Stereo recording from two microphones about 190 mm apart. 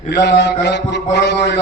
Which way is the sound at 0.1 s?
65° left (ahead or behind).